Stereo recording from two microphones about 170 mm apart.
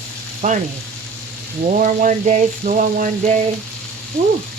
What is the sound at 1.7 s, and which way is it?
Frying, 50° right (ahead or behind).